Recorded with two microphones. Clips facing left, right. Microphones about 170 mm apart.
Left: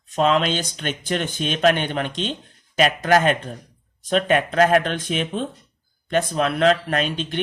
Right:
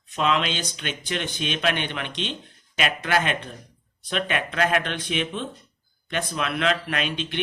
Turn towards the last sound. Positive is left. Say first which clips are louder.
# left 4 dB
turn(degrees=40)  # may be behind; listen again after turning